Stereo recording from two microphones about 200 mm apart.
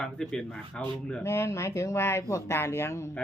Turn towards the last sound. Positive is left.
turn(degrees=10)  # may be behind; listen again after turning